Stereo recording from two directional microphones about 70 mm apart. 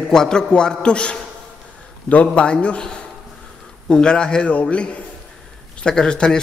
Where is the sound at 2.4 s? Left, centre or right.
Centre.